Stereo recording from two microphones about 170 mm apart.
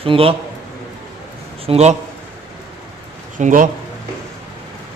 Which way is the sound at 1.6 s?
40° right (ahead or behind).